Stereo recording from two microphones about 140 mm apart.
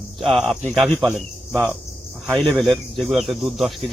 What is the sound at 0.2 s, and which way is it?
Speech, centre (ahead or behind).